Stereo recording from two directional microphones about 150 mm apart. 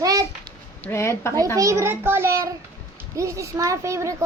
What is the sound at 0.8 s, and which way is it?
Speech, 15° left (ahead or behind).